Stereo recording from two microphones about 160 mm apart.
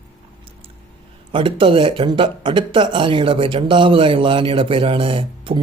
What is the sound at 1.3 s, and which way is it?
Speech, 30° right (ahead or behind).